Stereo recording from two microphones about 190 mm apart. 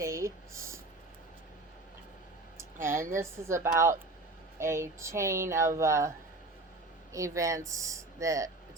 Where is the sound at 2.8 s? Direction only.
15° right (ahead or behind).